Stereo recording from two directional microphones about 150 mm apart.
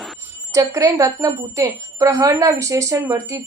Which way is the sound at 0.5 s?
20° right (ahead or behind).